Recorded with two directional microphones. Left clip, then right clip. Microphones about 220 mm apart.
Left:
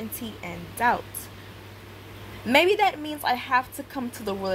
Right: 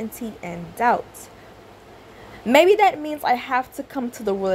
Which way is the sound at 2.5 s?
15° right (ahead or behind).